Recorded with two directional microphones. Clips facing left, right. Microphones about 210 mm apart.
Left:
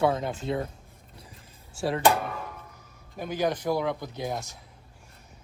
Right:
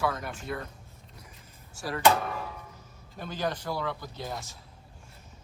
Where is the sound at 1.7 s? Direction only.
25° left (ahead or behind).